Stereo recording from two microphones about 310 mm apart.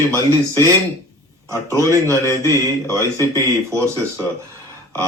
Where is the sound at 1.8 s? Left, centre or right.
Centre.